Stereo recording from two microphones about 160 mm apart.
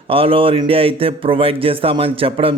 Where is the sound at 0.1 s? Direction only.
35° right (ahead or behind).